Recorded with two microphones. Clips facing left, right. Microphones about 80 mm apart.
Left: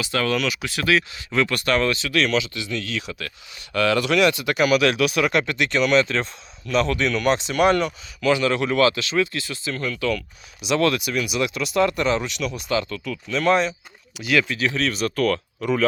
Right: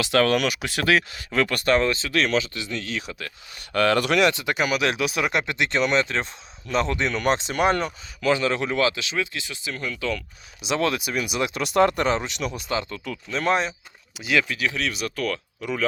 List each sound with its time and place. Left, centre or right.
0.0 s speech: right
3.8 s speech: right
4.2 s speech: right
11.3 s speech: right; by 15.8 s centre